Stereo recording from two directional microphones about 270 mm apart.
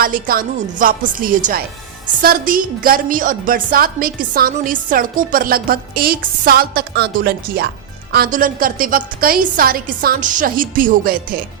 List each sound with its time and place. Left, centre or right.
0.0 s a woman's voice: right